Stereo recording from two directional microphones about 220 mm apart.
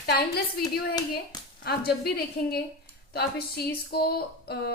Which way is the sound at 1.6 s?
45° left (ahead or behind).